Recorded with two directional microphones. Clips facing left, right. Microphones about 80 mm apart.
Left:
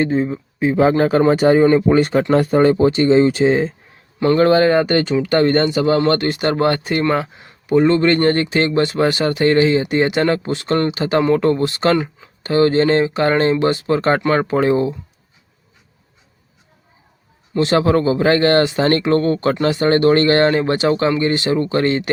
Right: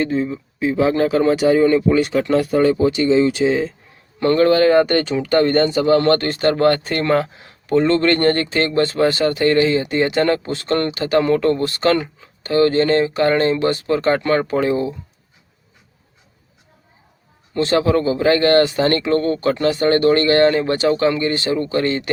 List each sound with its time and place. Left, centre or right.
0.0 s speech: left
4.4 s speech: left
7.3 s a sound: centre
7.8 s speech: centre; by 14.8 s left
17.6 s speech: left